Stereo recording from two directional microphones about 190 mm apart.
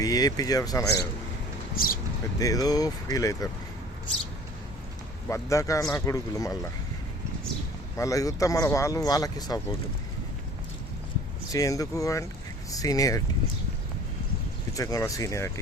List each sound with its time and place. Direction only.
0.0 s speech: 20° left (ahead or behind)
1.7 s speech: 50° left (ahead or behind)
2.4 s speech: 20° left (ahead or behind)
5.3 s speech: 15° left (ahead or behind)
7.9 s speech: 15° left (ahead or behind)
11.5 s speech: 20° left (ahead or behind)
14.8 s speech: 15° left (ahead or behind)